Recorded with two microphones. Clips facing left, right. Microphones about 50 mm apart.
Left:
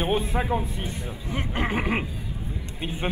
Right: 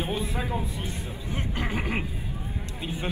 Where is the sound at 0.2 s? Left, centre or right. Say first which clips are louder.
Left 4 dB; left.